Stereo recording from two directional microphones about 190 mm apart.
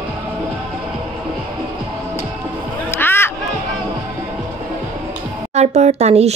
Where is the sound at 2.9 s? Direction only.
10° left (ahead or behind).